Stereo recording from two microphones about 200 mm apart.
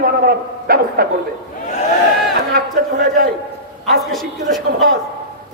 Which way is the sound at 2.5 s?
50° right (ahead or behind).